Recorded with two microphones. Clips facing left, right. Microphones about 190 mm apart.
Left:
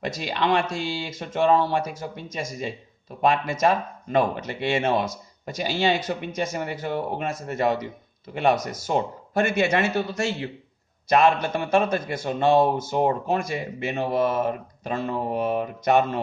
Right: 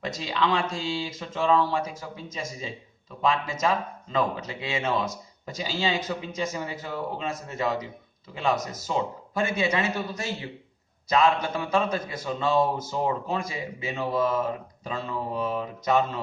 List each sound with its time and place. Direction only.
0.0 s a man's voice: 65° left (ahead or behind)
11.7 s a man's voice: 70° left (ahead or behind)